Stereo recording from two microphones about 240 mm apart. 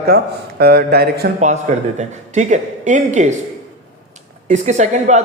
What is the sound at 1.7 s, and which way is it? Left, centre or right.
Speech, right.